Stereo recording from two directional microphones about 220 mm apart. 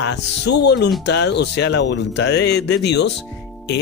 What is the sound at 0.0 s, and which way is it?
Speech, 50° left (ahead or behind).